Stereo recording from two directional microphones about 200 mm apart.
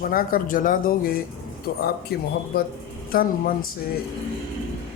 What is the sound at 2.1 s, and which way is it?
Speech, 50° left (ahead or behind).